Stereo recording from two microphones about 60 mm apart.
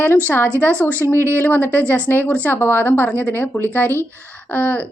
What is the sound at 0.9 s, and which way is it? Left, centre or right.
Speech, left.